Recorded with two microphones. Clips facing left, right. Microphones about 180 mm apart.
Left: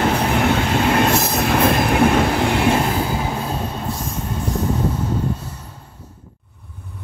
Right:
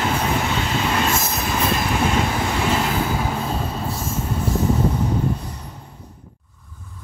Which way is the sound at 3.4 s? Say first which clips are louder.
Left 1 dB; centre (ahead or behind).